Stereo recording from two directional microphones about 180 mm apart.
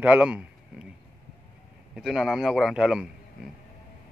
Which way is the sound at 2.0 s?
Centre (ahead or behind).